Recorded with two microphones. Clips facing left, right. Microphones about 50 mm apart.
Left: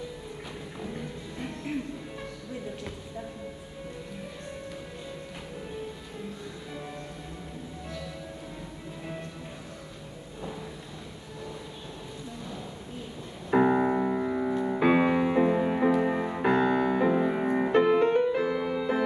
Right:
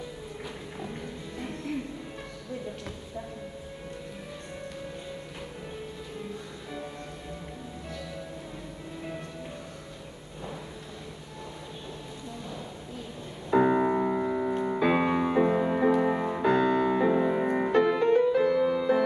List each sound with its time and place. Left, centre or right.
13.5 s piano: centre
14.8 s music: centre
17.7 s music: left
18.4 s music: centre